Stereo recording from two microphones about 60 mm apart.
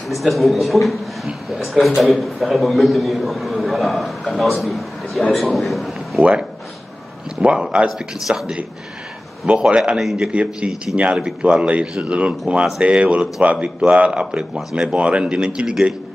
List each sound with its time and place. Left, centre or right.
0.1 s a man's voice: centre
7.4 s speech: centre
9.5 s speech: centre
10.3 s speech: right
14.5 s speech: centre
14.9 s speech: centre